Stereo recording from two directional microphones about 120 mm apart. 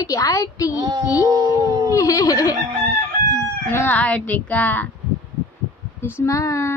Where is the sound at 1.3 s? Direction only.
30° right (ahead or behind).